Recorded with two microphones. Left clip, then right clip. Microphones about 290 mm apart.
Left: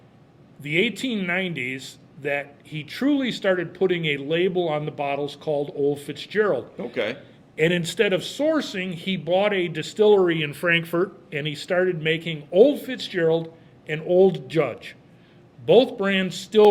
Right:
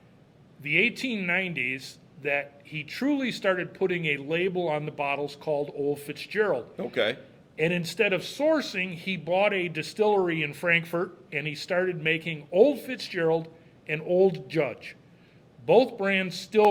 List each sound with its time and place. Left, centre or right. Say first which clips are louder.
0.6 s speech: left 1 dB; centre
6.7 s a man's voice: even; right
7.5 s speech: left 5 dB; left